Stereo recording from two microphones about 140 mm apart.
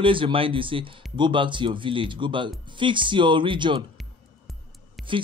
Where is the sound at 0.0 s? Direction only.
40° right (ahead or behind).